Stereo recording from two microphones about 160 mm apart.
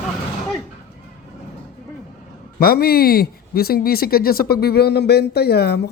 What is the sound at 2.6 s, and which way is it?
Speech, 70° left (ahead or behind).